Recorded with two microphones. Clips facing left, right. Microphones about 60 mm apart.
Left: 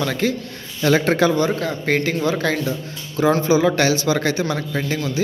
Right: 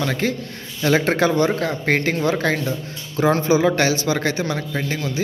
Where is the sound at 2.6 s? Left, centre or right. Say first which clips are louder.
Left 1 dB; right.